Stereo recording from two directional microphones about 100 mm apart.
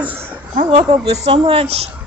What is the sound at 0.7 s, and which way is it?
Speech, 90° right.